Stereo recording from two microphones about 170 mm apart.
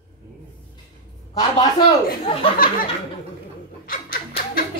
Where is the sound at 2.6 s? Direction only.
55° left (ahead or behind).